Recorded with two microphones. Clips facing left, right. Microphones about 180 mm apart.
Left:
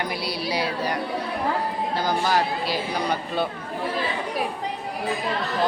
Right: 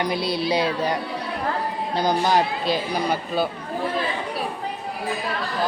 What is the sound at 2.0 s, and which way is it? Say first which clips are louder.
Speech: right 4 dB; 20° right (ahead or behind).